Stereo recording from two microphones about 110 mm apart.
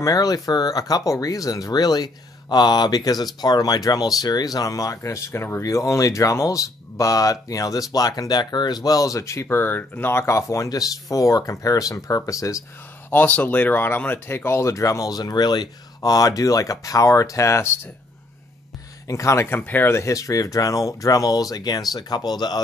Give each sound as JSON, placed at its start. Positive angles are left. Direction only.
{"t": 0.0, "sound": "speech", "side_deg": 35}
{"t": 13.1, "sound": "speech", "side_deg": 15}
{"t": 19.0, "sound": "speech", "side_deg": 30}